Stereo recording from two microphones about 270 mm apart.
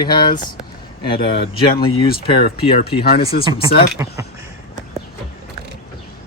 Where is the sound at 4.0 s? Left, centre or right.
Centre.